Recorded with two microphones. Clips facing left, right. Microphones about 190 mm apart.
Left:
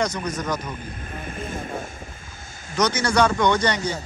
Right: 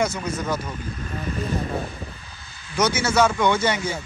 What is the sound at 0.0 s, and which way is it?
Speech, 5° right (ahead or behind).